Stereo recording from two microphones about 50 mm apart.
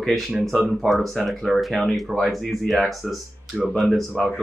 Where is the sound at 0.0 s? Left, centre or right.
Centre.